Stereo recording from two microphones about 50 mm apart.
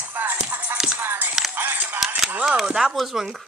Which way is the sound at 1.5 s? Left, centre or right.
Right.